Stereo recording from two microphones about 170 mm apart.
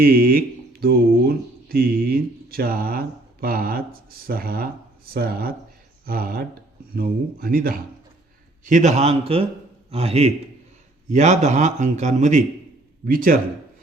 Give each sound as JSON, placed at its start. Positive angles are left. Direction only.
{"t": 0.0, "sound": "speech", "side_deg": -60}
{"t": 8.6, "sound": "a man's voice", "side_deg": -45}
{"t": 13.1, "sound": "speech", "side_deg": -55}